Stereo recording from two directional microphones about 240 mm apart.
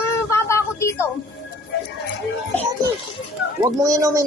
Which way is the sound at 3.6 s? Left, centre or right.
Centre.